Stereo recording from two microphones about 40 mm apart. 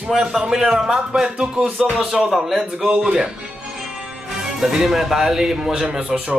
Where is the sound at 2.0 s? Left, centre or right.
Centre.